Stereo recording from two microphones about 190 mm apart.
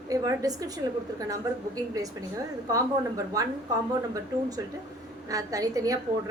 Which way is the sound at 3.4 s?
20° right (ahead or behind).